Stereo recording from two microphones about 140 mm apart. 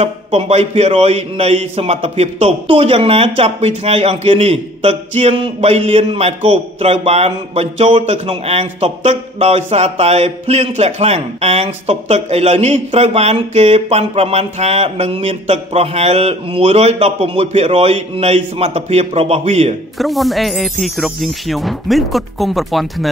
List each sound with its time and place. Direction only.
0.0 s speech: 45° right (ahead or behind)
20.0 s speech: centre (ahead or behind)